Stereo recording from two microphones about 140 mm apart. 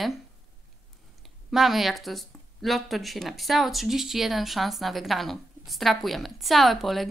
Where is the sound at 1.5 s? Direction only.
Centre (ahead or behind).